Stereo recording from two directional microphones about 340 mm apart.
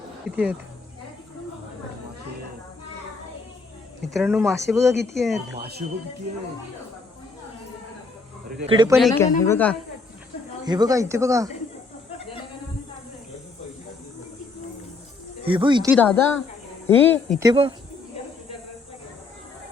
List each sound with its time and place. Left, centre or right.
0.3 s speech: centre
4.1 s speech: centre
5.5 s speech: right
8.6 s speech: centre
9.0 s speech: centre
10.7 s speech: centre
15.4 s speech: centre
16.0 s speech: centre
17.4 s speech: centre